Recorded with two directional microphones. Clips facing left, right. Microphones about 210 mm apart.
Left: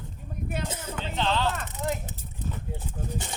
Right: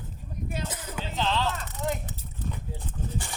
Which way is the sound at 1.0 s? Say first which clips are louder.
Left 1 dB; centre (ahead or behind).